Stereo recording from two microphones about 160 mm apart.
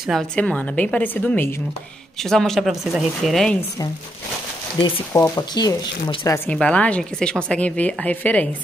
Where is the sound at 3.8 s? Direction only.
20° left (ahead or behind).